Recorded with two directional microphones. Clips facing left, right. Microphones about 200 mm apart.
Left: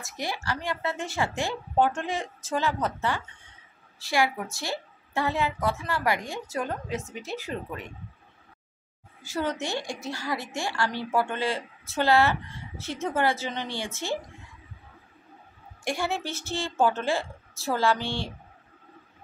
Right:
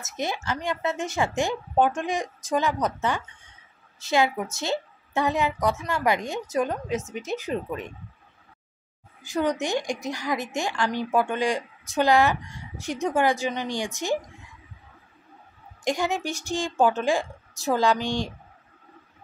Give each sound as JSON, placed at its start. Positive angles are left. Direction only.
{"t": 0.0, "sound": "a woman's voice", "side_deg": -20}
{"t": 9.2, "sound": "a woman's voice", "side_deg": -15}
{"t": 15.8, "sound": "a woman's voice", "side_deg": -15}